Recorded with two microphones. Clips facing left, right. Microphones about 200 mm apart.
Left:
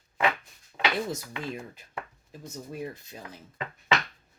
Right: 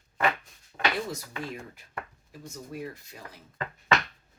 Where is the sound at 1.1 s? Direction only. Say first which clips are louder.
Left 2 dB; 20° left (ahead or behind).